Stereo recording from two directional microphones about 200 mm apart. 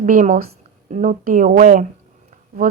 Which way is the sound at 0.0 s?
40° right (ahead or behind).